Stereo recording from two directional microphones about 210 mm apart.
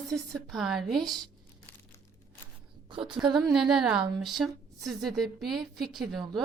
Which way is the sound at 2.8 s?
25° right (ahead or behind).